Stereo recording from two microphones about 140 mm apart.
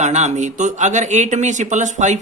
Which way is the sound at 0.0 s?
55° right (ahead or behind).